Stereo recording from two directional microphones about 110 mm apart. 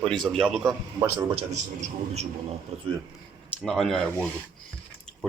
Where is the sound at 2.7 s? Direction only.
65° right (ahead or behind).